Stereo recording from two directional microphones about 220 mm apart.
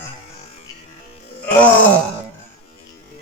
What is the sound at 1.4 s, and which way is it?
Wail, 5° left (ahead or behind).